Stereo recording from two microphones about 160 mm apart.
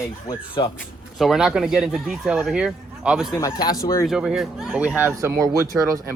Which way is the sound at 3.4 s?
25° left (ahead or behind).